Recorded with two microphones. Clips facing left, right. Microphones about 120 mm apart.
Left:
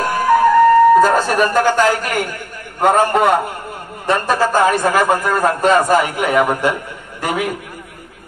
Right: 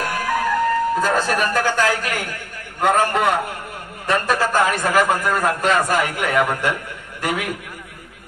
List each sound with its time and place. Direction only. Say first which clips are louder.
0.0 s music: left 9 dB; 30° left (ahead or behind)
1.0 s a man's voice: left 5 dB; 40° left (ahead or behind)